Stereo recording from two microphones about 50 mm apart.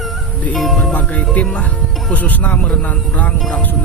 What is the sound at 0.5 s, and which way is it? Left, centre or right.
Speech, centre.